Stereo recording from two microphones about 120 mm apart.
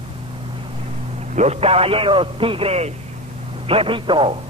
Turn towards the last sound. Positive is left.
turn(degrees=-45)  # may be behind; listen again after turning